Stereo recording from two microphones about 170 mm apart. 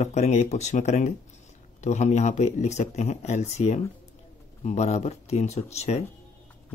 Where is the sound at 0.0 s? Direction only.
40° left (ahead or behind).